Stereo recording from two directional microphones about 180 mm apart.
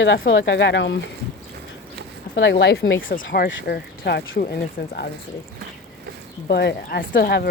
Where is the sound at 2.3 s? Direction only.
80° left.